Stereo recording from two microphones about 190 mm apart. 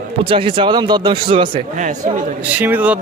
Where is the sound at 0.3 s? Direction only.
30° right (ahead or behind).